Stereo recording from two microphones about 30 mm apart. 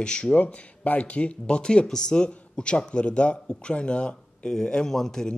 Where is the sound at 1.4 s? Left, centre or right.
Left.